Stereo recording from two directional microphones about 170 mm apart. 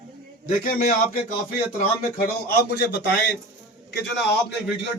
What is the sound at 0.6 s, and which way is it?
Speech, 55° left (ahead or behind).